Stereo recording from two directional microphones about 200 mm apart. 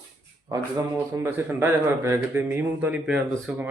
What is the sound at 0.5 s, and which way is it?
A man's voice, 20° right (ahead or behind).